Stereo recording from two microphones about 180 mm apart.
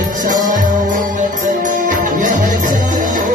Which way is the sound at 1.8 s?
50° right (ahead or behind).